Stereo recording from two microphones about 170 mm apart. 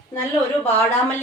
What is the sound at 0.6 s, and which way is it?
Speech, 10° left (ahead or behind).